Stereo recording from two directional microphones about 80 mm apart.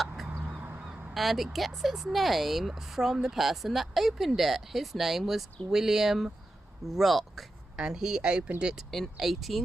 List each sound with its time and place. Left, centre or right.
0.3 s a sound: right
1.1 s speech: centre
8.9 s speech: centre